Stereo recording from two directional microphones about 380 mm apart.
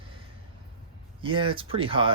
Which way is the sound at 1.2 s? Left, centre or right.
Centre.